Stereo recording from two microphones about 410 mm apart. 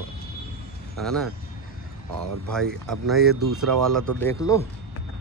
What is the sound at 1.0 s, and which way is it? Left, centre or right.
Speech, centre.